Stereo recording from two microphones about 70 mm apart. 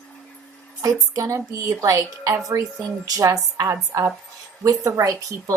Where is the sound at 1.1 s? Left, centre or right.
Right.